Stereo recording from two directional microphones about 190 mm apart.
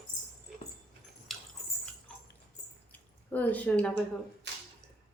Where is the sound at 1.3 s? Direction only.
Centre (ahead or behind).